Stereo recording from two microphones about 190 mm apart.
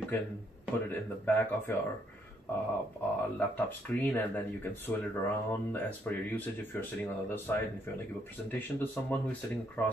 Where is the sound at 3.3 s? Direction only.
10° left (ahead or behind).